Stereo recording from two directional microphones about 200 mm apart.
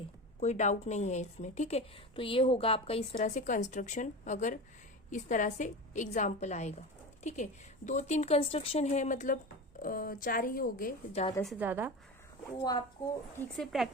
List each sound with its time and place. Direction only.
0.3 s a woman's voice: 35° left (ahead or behind)
7.9 s a woman's voice: 35° left (ahead or behind)
11.4 s a woman's voice: 5° right (ahead or behind)
13.0 s speech: 20° left (ahead or behind)
13.4 s speech: centre (ahead or behind)